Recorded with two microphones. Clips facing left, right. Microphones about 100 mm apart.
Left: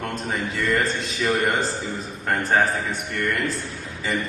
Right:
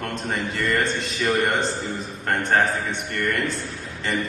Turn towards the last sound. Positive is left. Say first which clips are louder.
# even
turn(degrees=0)  # may be behind; listen again after turning